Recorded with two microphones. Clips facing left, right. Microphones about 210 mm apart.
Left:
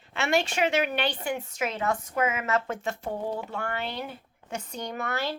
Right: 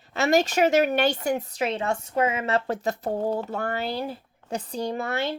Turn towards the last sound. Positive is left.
turn(degrees=-25)  # may be behind; listen again after turning